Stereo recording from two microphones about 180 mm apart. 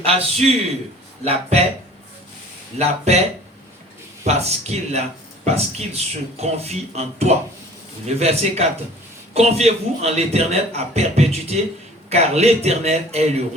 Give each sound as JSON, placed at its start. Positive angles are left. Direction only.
{"t": 0.0, "sound": "a man's voice", "side_deg": -35}
{"t": 2.7, "sound": "a man's voice", "side_deg": -35}
{"t": 4.3, "sound": "a man's voice", "side_deg": -35}